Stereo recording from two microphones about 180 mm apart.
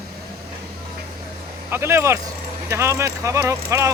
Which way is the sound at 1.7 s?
15° right (ahead or behind).